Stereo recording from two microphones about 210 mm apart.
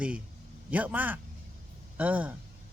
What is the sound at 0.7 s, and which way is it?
A man's voice, 5° right (ahead or behind).